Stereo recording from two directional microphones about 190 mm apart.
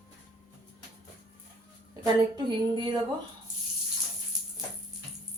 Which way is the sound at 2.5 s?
25° right (ahead or behind).